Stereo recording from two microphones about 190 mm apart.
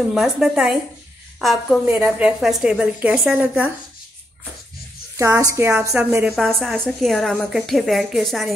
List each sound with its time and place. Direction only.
0.1 s a woman's voice: centre (ahead or behind)
5.1 s a woman's voice: 15° right (ahead or behind); by 8.5 s centre (ahead or behind)